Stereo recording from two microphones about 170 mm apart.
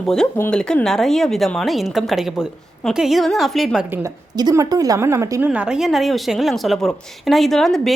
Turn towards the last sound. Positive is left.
turn(degrees=0)  # may be behind; listen again after turning